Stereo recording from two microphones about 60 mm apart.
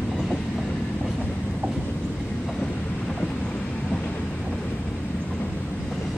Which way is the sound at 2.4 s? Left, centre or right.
Centre.